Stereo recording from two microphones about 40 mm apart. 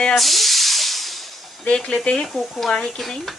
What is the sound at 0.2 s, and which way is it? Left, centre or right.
Hiss, centre.